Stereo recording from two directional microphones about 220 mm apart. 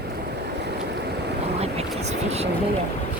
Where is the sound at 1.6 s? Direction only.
30° right (ahead or behind).